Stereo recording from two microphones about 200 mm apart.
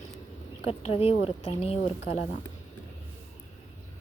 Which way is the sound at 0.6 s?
30° left (ahead or behind).